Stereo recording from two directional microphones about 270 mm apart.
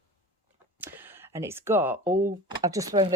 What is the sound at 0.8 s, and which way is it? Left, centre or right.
Speech, centre.